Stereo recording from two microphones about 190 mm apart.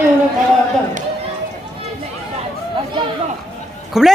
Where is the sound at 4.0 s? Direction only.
Centre (ahead or behind).